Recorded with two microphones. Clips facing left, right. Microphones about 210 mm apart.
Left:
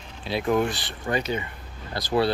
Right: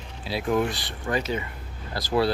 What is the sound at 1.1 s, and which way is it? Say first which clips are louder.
Speech: even; 30° left (ahead or behind).